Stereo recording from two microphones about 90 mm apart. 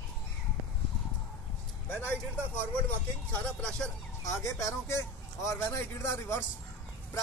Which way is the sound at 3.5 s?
10° left (ahead or behind).